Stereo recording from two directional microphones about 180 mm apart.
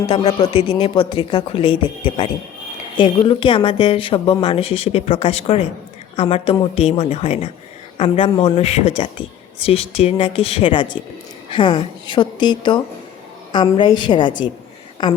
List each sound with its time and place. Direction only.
0.1 s a woman's voice: 30° left (ahead or behind)
8.5 s a woman's voice: 40° left (ahead or behind)